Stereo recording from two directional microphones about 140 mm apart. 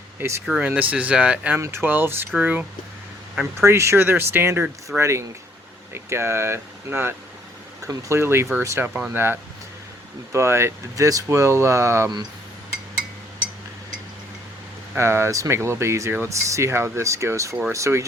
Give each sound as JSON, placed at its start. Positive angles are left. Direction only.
{"t": 0.2, "sound": "speech", "side_deg": -20}
{"t": 0.4, "sound": "speech", "side_deg": -10}
{"t": 14.9, "sound": "speech", "side_deg": -20}